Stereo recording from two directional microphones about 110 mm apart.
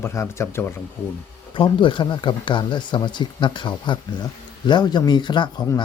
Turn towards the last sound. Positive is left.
turn(degrees=45)  # may be behind; listen again after turning